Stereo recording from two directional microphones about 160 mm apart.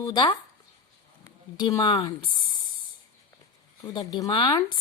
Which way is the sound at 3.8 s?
25° left (ahead or behind).